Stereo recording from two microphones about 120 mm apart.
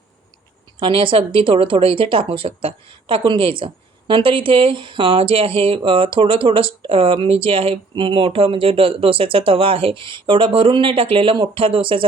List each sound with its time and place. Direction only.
0.8 s speech: 45° right (ahead or behind)